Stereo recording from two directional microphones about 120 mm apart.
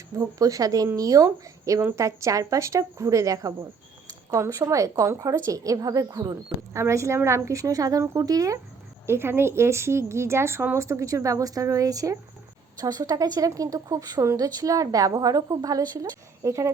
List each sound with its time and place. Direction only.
0.2 s speech: 30° right (ahead or behind)